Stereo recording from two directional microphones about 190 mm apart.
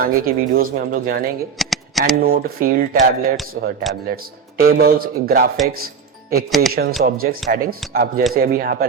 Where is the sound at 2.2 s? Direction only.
50° right (ahead or behind).